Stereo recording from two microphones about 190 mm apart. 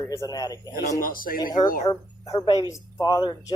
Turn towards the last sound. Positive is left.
turn(degrees=20)  # may be behind; listen again after turning